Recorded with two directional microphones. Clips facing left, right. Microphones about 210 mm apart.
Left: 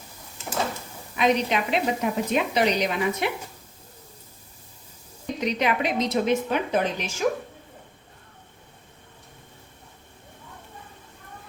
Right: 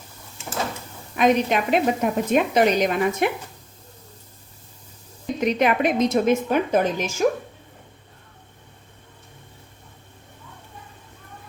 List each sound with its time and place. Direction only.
1.1 s a woman's voice: 50° right (ahead or behind)
5.4 s a woman's voice: 50° right (ahead or behind)